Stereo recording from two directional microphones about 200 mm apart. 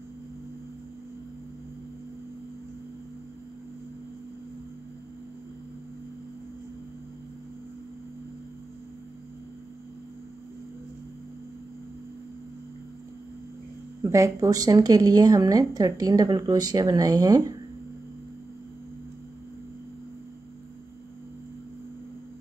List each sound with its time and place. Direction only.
14.1 s a woman's voice: 15° right (ahead or behind)